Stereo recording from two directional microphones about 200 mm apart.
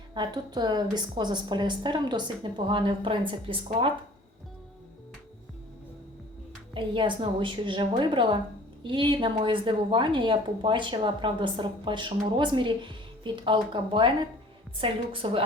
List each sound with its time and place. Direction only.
0.1 s a woman's voice: 20° right (ahead or behind)
6.7 s a woman's voice: 25° right (ahead or behind)